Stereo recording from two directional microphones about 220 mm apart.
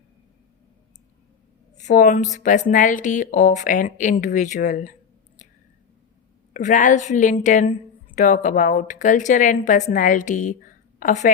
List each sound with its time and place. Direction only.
1.8 s speech: 35° left (ahead or behind)
6.5 s speech: 35° left (ahead or behind)